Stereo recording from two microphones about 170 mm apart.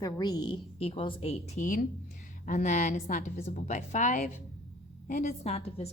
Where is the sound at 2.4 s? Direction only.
45° left (ahead or behind).